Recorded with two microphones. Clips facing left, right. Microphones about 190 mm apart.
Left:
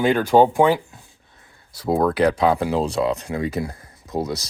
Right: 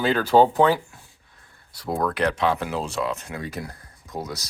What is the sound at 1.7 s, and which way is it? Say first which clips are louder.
Speech: left 6 dB; 25° left (ahead or behind).